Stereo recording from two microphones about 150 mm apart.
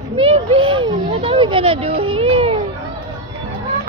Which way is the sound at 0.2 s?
40° right (ahead or behind).